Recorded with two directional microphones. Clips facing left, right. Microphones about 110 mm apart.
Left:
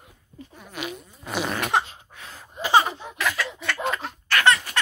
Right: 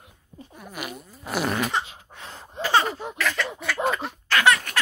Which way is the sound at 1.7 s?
55° left (ahead or behind).